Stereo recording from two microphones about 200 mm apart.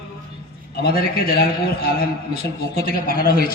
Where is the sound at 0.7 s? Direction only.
50° left (ahead or behind).